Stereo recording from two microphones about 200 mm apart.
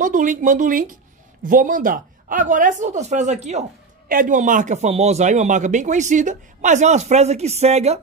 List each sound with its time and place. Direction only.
0.0 s a man's voice: 40° right (ahead or behind)